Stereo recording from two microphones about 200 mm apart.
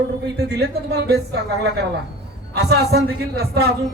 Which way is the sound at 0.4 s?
55° right (ahead or behind).